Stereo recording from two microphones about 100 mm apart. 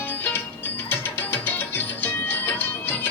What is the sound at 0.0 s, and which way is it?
Music, 20° left (ahead or behind).